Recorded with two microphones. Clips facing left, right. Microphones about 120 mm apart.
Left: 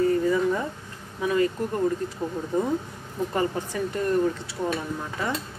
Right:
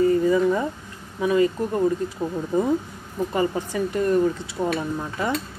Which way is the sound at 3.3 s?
10° right (ahead or behind).